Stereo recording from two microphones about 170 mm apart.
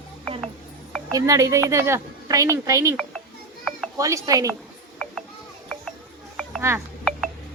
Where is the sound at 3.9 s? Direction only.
20° right (ahead or behind).